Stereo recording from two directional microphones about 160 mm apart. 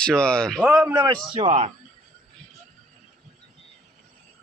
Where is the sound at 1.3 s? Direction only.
40° right (ahead or behind).